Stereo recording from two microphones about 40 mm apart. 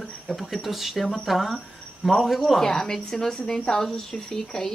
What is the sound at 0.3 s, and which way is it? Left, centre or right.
Speech, centre.